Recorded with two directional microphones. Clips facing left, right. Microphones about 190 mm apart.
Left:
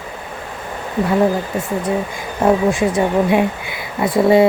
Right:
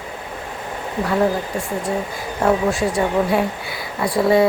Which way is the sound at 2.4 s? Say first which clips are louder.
Left 3 dB; 20° left (ahead or behind).